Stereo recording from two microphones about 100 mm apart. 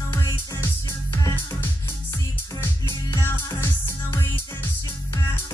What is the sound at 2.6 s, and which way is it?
Music, 30° left (ahead or behind).